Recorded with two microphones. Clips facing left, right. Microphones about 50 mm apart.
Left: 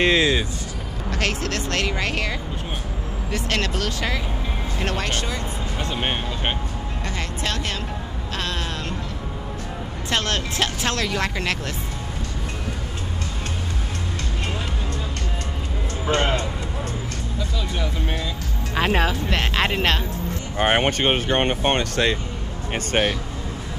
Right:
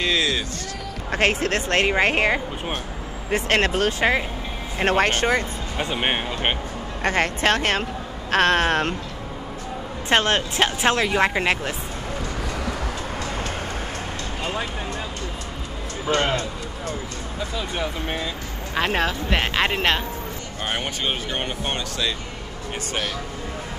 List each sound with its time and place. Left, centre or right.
0.0 s a sound: left
1.1 s speech: right
5.8 s speech: centre
7.0 s speech: right
10.0 s speech: right
16.1 s speech: centre
17.6 s speech: centre
18.8 s speech: centre
20.5 s speech: left